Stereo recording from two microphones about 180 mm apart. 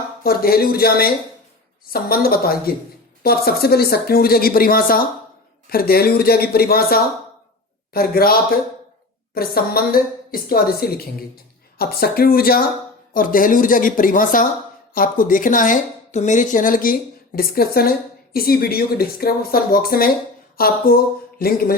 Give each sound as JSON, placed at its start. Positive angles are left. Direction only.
{"t": 0.2, "sound": "a woman's voice", "side_deg": 55}